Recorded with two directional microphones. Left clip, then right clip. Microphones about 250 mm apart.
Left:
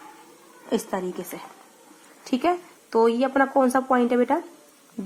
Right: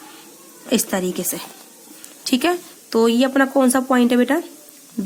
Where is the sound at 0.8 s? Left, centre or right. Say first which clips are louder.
Right 6 dB; right.